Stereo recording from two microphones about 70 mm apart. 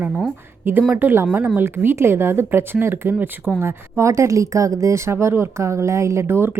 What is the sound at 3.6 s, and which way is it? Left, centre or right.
Speech, right.